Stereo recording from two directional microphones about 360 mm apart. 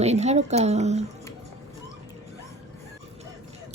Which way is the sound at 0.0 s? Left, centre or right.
Centre.